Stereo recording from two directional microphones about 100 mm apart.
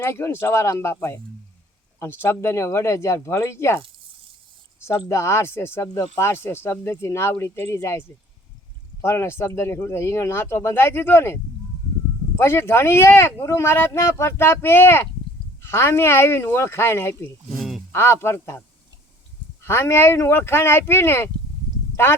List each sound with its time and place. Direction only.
0.0 s speech: 25° left (ahead or behind)
12.4 s speech: 25° left (ahead or behind)
17.5 s a sound: 5° right (ahead or behind)
17.9 s speech: 25° left (ahead or behind)
19.6 s speech: 25° left (ahead or behind)